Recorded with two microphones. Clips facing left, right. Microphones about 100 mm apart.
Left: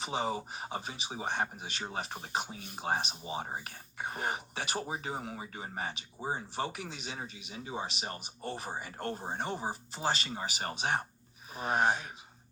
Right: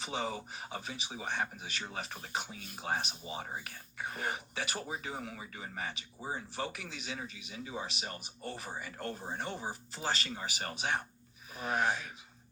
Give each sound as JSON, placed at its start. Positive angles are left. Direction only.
{"t": 0.0, "sound": "speech", "side_deg": 25}